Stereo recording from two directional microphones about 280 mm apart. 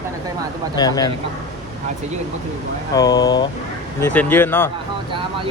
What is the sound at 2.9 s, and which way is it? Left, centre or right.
Speech, centre.